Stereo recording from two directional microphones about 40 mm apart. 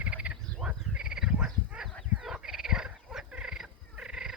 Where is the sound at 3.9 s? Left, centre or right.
Centre.